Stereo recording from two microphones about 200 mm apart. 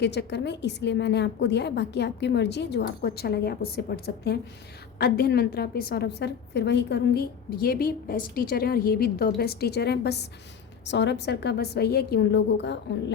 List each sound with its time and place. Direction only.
0.0 s a woman's voice: 60° left (ahead or behind)